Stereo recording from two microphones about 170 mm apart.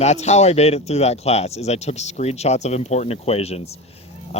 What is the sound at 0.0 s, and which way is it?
Speech, 40° left (ahead or behind).